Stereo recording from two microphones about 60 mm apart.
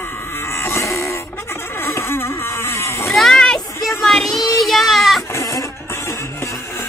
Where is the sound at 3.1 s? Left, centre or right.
Centre.